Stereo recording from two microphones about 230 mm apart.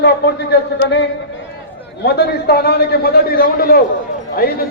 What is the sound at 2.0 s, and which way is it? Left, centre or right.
A man's voice, left.